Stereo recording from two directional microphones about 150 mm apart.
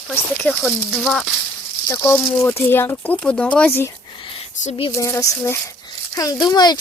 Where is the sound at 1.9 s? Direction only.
15° left (ahead or behind).